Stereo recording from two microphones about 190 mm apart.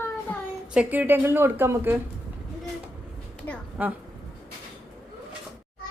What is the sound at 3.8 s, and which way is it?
Speech, 5° right (ahead or behind).